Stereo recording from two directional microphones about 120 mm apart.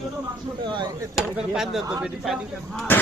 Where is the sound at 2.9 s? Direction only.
15° left (ahead or behind).